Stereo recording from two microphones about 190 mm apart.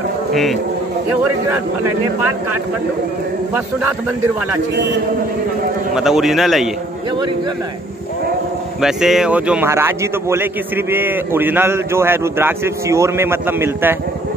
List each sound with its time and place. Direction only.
0.3 s a man's voice: centre (ahead or behind)
5.9 s a man's voice: centre (ahead or behind)
8.8 s speech: centre (ahead or behind)